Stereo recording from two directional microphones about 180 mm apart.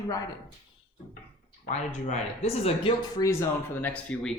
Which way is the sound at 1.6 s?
40° left (ahead or behind).